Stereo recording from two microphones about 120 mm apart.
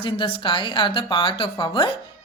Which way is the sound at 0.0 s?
45° left (ahead or behind).